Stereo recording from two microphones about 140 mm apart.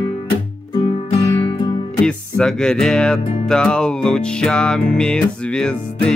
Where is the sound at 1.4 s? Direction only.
35° left (ahead or behind).